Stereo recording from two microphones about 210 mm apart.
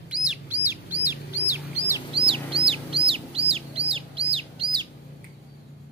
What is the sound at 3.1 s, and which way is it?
Bird, 25° right (ahead or behind).